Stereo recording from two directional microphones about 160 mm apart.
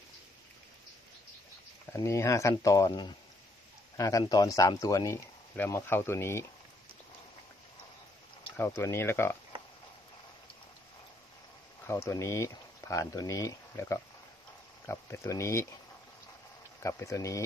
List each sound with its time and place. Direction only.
2.0 s speech: 20° left (ahead or behind)
8.5 s speech: 15° left (ahead or behind)
11.9 s speech: 15° left (ahead or behind)
16.8 s speech: 20° left (ahead or behind)